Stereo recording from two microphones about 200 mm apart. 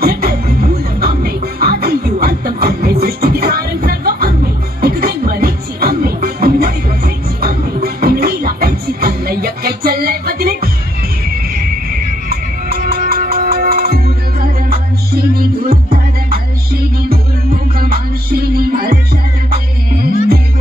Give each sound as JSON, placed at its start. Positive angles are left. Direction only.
{"t": 0.0, "sound": "music", "side_deg": -50}
{"t": 12.3, "sound": "music", "side_deg": -50}